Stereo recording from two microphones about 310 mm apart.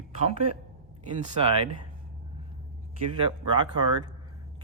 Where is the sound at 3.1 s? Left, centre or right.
Centre.